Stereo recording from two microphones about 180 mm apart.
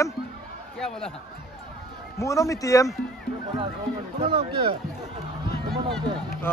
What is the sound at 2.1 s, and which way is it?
Speech, 15° left (ahead or behind).